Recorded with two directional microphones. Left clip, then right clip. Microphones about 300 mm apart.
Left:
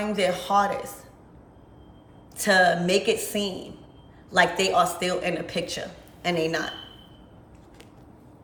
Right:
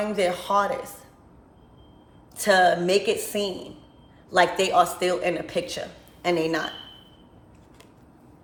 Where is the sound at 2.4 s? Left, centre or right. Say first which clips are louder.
Right 1 dB; centre.